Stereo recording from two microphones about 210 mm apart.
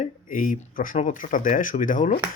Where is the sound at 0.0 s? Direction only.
40° left (ahead or behind).